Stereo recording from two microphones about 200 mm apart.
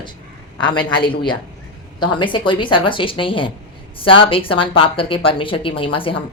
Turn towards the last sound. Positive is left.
turn(degrees=25)  # may be behind; listen again after turning